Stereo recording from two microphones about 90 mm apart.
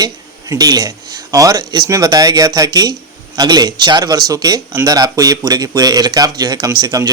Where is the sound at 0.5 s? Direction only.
45° right (ahead or behind).